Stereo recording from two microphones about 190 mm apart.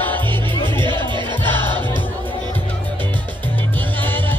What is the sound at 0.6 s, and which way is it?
Music, 25° right (ahead or behind).